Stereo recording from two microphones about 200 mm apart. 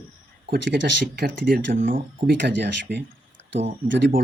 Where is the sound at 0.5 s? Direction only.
60° right (ahead or behind).